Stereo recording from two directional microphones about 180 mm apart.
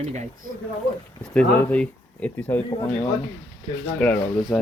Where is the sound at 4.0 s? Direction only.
5° left (ahead or behind).